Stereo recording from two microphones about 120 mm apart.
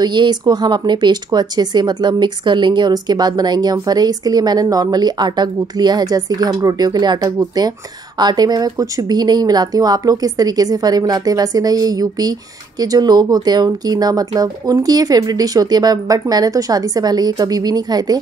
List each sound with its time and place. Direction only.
0.0 s speech: 40° right (ahead or behind)